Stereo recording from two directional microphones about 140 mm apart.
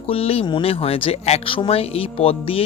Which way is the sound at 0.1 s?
45° left (ahead or behind).